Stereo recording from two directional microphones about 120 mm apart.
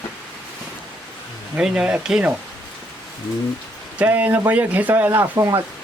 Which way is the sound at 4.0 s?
15° right (ahead or behind).